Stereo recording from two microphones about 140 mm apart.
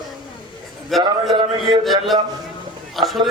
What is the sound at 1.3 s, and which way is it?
Speech, 30° right (ahead or behind).